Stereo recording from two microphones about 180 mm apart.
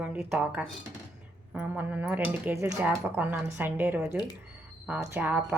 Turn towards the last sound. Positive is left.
turn(degrees=-10)  # may be behind; listen again after turning